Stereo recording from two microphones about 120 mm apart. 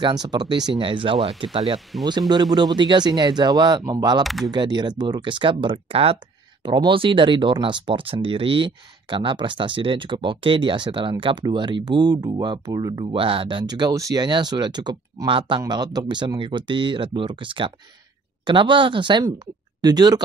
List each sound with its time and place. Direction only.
0.0 s speech: 35° right (ahead or behind)
4.2 s speech: centre (ahead or behind)
4.5 s speech: 40° right (ahead or behind)
15.6 s speech: 35° right (ahead or behind)